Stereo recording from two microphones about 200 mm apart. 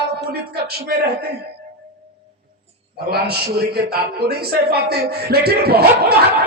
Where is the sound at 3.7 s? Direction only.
50° right (ahead or behind).